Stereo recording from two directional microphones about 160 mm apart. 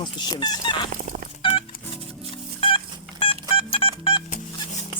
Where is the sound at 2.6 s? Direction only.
35° left (ahead or behind).